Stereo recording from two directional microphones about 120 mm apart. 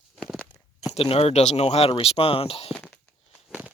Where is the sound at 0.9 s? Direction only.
55° left (ahead or behind).